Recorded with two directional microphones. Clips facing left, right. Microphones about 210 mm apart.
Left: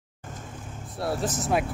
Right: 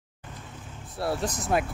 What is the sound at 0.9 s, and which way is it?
Speech, centre (ahead or behind).